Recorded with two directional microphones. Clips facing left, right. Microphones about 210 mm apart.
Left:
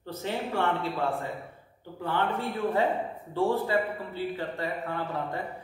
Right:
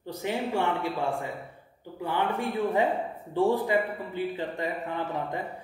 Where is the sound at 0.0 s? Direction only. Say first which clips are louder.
Right 2 dB; 15° right (ahead or behind).